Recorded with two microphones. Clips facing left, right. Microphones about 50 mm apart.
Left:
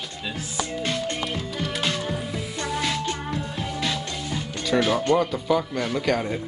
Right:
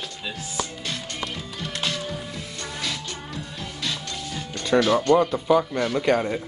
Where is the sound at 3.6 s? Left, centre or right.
Left.